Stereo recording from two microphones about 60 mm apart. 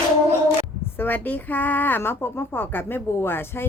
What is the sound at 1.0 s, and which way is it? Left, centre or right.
Speech, left.